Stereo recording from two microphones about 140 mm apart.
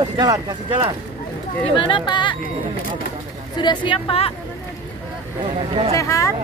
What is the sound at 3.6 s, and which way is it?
Speech, 40° left (ahead or behind).